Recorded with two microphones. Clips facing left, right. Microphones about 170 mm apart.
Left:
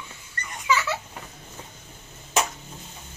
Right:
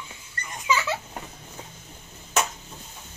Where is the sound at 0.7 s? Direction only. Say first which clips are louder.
Left 1 dB; 20° right (ahead or behind).